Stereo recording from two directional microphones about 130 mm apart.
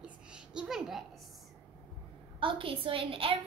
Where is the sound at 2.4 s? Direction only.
40° right (ahead or behind).